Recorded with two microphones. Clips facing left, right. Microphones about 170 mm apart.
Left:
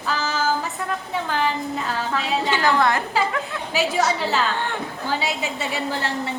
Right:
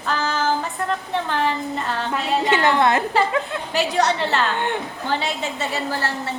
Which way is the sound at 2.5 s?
20° right (ahead or behind).